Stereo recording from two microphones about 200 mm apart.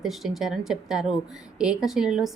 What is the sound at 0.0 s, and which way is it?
Speech, centre (ahead or behind).